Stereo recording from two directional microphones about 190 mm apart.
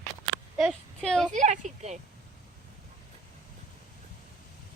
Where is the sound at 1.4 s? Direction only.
40° right (ahead or behind).